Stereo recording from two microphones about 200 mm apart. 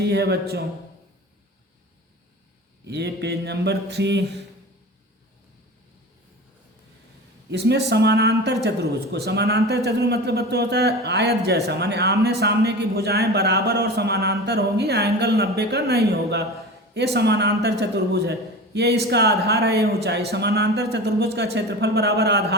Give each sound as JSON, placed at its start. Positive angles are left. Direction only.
{"t": 0.0, "sound": "speech", "side_deg": -55}
{"t": 2.8, "sound": "speech", "side_deg": -55}
{"t": 7.5, "sound": "speech", "side_deg": -55}